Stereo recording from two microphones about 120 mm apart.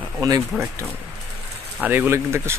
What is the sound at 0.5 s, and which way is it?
Speech, 5° right (ahead or behind).